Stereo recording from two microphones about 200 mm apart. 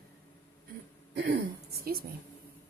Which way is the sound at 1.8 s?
50° right (ahead or behind).